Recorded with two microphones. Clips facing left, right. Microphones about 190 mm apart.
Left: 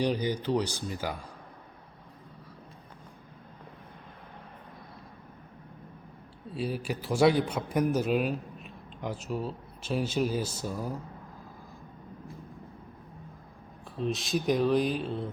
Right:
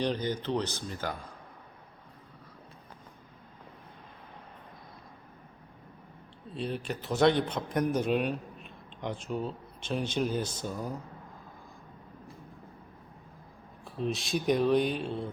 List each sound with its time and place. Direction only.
0.0 s a man's voice: 10° left (ahead or behind)
6.5 s a man's voice: 5° left (ahead or behind)
13.8 s speech: centre (ahead or behind)